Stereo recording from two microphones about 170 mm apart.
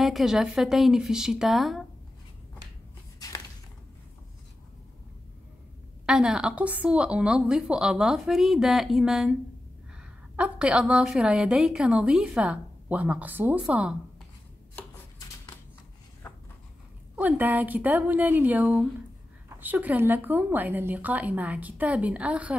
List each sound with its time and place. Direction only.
0.0 s a woman's voice: centre (ahead or behind)
3.2 s a sound: 20° left (ahead or behind)
6.0 s a woman's voice: 5° right (ahead or behind)
17.1 s a woman's voice: 10° right (ahead or behind)